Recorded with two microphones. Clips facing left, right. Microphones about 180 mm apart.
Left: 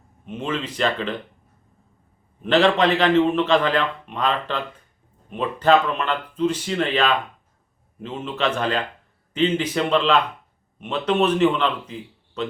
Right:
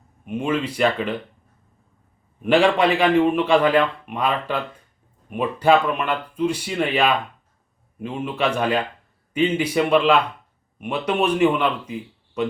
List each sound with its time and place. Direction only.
0.3 s a man's voice: 10° right (ahead or behind)
2.4 s a man's voice: 10° right (ahead or behind)